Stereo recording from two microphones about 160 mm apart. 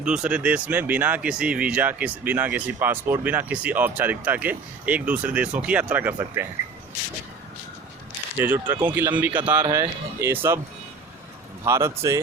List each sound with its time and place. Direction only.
0.0 s speech: 5° right (ahead or behind)
8.4 s speech: 15° right (ahead or behind)
11.6 s speech: 15° right (ahead or behind)